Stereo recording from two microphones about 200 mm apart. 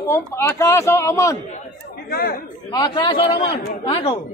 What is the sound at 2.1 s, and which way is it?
Speech, 50° left (ahead or behind).